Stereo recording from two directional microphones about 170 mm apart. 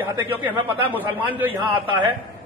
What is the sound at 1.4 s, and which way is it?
Speech, 30° right (ahead or behind).